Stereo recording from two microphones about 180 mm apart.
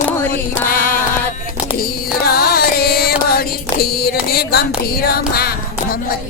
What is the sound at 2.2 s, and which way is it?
Music, 60° left (ahead or behind).